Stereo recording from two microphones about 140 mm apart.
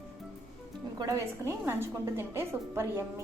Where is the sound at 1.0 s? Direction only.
20° right (ahead or behind).